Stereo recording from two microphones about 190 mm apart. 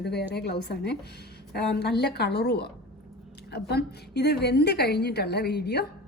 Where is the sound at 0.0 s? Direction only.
60° left (ahead or behind).